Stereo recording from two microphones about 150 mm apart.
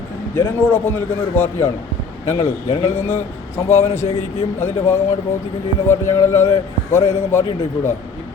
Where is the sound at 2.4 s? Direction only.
40° left (ahead or behind).